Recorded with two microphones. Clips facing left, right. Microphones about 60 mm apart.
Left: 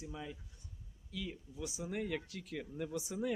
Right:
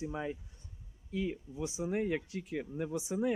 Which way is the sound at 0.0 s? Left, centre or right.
Right.